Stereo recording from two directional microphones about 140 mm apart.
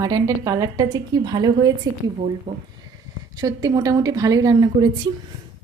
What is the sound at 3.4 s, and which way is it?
A woman's voice, 25° right (ahead or behind).